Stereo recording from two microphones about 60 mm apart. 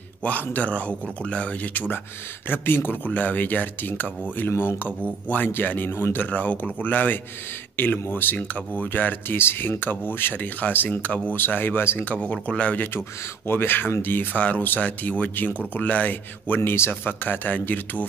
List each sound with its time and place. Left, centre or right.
0.2 s speech: left
12.0 s speech: left
13.5 s speech: left